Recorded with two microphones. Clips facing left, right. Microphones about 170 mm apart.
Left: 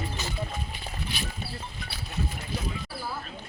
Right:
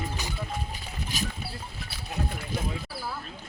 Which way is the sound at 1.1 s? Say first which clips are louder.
Right 6 dB; 40° right (ahead or behind).